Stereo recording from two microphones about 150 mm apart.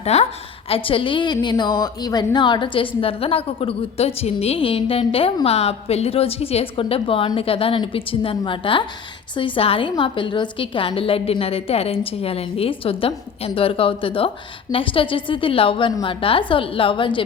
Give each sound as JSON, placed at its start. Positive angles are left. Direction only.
{"t": 0.0, "sound": "a woman's voice", "side_deg": 45}